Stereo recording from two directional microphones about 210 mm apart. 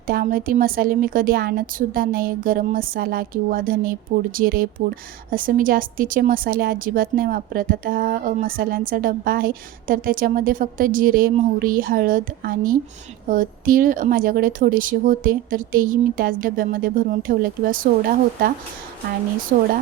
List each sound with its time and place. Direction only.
0.1 s a woman's voice: 45° right (ahead or behind)
19.5 s speech: 40° right (ahead or behind)